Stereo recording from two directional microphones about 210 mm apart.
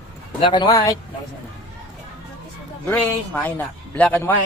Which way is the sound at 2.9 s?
5° left (ahead or behind).